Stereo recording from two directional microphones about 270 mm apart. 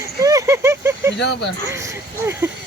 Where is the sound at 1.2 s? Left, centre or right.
Left.